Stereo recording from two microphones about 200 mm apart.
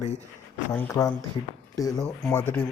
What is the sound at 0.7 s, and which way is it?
Speech, 15° left (ahead or behind).